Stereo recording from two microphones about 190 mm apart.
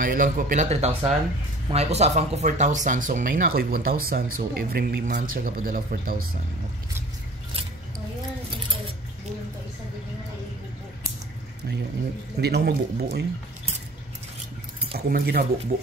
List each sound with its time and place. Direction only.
0.0 s speech: 45° right (ahead or behind)
12.4 s speech: 60° right (ahead or behind)
15.0 s speech: 55° right (ahead or behind)